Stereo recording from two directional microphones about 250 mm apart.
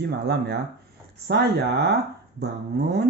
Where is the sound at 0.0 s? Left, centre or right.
Right.